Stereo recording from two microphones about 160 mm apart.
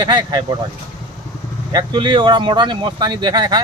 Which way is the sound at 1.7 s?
30° right (ahead or behind).